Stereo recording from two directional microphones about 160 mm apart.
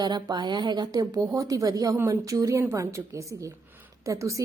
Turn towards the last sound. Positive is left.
turn(degrees=-20)  # may be behind; listen again after turning